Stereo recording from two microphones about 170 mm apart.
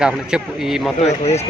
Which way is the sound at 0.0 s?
5° right (ahead or behind).